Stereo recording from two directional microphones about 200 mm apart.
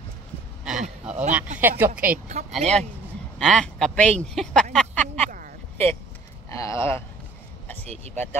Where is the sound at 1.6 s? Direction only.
10° right (ahead or behind).